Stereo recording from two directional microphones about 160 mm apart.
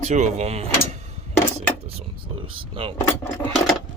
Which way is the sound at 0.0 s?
45° right (ahead or behind).